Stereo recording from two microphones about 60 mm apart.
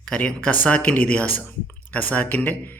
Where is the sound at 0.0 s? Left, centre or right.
Centre.